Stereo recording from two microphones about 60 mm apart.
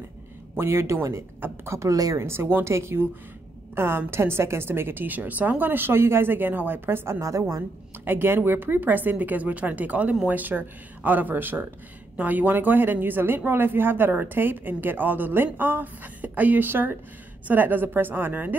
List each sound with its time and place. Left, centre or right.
0.6 s a woman's voice: right
2.1 s a woman's voice: right
7.1 s a woman's voice: right
8.0 s a woman's voice: right